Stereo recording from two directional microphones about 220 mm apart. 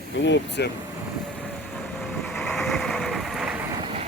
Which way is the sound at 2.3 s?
5° left (ahead or behind).